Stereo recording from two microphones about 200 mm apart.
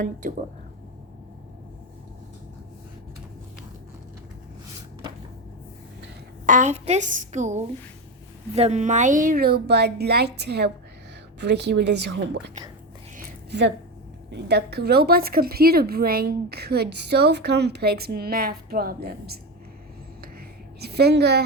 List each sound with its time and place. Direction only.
0.0 s a woman's voice: 40° right (ahead or behind)
6.4 s a woman's voice: 40° right (ahead or behind); by 12.4 s 60° right (ahead or behind)
13.1 s a sound: 55° right (ahead or behind)
14.3 s a woman's voice: 55° right (ahead or behind)
20.7 s a woman's voice: 55° right (ahead or behind)